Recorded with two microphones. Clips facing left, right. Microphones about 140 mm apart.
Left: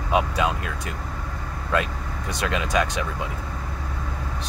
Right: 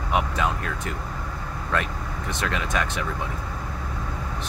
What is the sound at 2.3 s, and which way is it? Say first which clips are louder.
Speech: left 2 dB; 15° left (ahead or behind).